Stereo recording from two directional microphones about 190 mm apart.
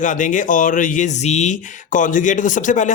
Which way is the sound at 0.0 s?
40° left (ahead or behind).